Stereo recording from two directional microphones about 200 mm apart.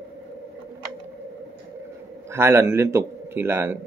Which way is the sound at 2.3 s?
10° right (ahead or behind).